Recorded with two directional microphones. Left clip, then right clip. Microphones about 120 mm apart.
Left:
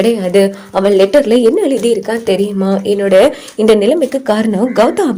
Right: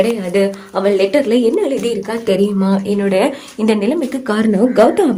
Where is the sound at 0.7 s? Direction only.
40° left (ahead or behind).